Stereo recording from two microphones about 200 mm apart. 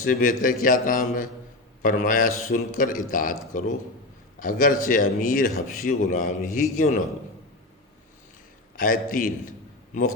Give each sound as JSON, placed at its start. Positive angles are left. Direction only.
{"t": 0.0, "sound": "a man's voice", "side_deg": 45}
{"t": 8.7, "sound": "a man's voice", "side_deg": 45}